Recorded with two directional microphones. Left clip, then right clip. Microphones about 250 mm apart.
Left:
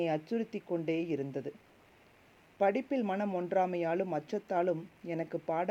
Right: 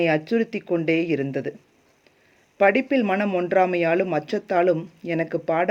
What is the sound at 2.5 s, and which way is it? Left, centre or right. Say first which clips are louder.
Speech: right 12 dB; left.